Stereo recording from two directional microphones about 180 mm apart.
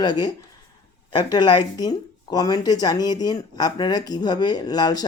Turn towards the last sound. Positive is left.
turn(degrees=20)  # may be behind; listen again after turning